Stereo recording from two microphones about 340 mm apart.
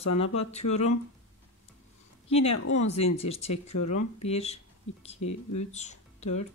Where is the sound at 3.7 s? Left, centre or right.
Left.